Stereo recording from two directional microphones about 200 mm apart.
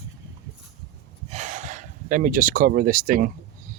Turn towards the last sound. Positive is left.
turn(degrees=-45)  # may be behind; listen again after turning